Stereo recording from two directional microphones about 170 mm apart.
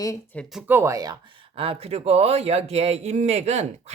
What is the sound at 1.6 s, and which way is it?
Speech, 35° right (ahead or behind).